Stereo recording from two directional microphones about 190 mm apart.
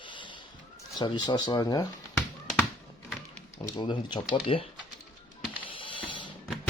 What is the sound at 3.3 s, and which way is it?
Speech, 15° left (ahead or behind).